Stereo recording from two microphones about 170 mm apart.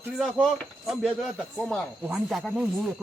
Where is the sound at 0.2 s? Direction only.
Centre (ahead or behind).